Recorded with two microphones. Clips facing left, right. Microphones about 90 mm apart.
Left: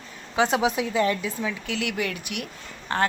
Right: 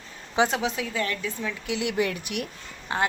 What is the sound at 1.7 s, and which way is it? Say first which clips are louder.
Speech: right 6 dB; 25° right (ahead or behind).